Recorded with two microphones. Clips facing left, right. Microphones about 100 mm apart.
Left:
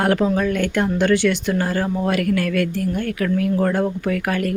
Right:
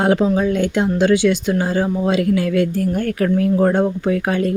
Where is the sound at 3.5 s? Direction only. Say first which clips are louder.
Right 4 dB; 25° right (ahead or behind).